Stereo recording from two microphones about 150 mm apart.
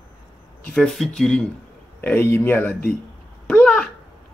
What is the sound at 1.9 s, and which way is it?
Speech, 15° left (ahead or behind).